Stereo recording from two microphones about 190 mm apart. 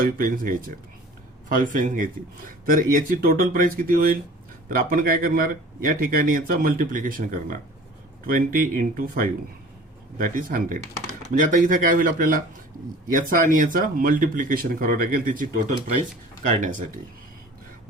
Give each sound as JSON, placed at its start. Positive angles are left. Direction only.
{"t": 0.0, "sound": "speech", "side_deg": -45}